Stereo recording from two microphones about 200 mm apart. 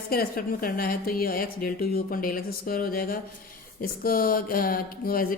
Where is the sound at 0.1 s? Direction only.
45° left (ahead or behind).